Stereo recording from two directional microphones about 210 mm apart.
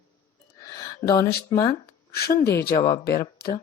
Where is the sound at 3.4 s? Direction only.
50° left (ahead or behind).